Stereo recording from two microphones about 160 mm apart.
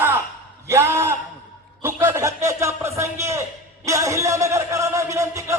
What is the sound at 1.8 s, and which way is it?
A man's voice, 15° right (ahead or behind).